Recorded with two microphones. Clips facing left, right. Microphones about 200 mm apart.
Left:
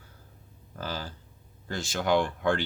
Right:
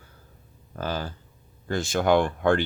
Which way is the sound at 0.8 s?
55° right (ahead or behind).